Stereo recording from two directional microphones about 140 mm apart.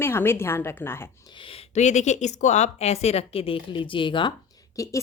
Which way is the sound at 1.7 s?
55° left (ahead or behind).